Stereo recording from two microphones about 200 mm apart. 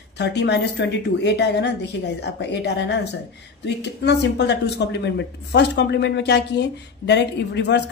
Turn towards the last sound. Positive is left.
turn(degrees=60)  # may be behind; listen again after turning